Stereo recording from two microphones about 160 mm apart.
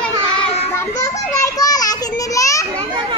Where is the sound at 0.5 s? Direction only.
40° left (ahead or behind).